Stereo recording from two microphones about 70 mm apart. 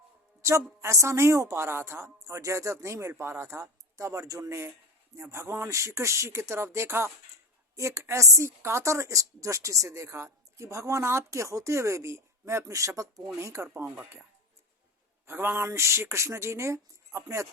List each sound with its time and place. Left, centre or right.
0.4 s a woman's voice: right
13.7 s speech: right
15.3 s speech: right